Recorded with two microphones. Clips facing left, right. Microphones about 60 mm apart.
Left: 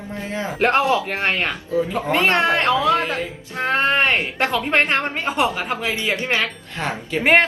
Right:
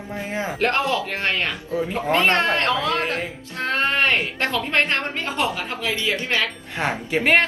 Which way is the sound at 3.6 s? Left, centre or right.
Left.